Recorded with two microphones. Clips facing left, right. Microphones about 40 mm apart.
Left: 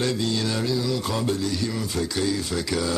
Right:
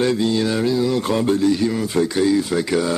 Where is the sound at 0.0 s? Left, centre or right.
Centre.